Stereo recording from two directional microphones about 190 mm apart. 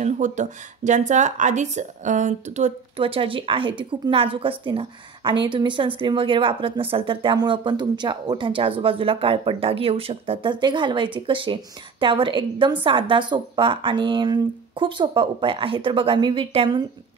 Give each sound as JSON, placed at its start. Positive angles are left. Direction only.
{"t": 0.0, "sound": "speech", "side_deg": -40}